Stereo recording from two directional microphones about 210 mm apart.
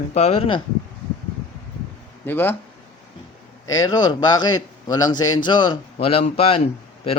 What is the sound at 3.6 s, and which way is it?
A man's voice, 15° left (ahead or behind).